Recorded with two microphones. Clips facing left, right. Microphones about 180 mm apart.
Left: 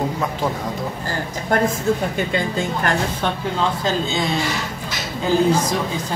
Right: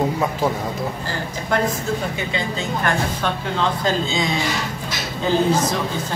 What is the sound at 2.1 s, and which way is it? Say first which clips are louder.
Speech: left 3 dB; 50° left (ahead or behind).